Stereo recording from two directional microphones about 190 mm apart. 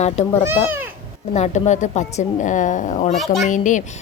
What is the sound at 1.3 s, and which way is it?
A woman's voice, 35° left (ahead or behind).